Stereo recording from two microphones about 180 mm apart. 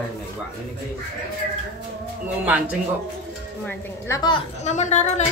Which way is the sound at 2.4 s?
10° right (ahead or behind).